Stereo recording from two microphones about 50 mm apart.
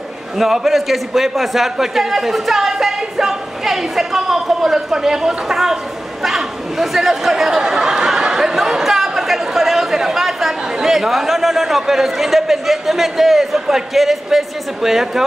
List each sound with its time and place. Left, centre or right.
0.4 s a man's voice: centre